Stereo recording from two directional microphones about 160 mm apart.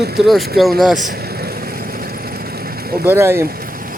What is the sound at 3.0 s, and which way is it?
Speech, 15° right (ahead or behind).